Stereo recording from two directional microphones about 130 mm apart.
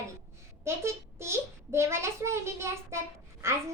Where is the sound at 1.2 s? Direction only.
20° right (ahead or behind).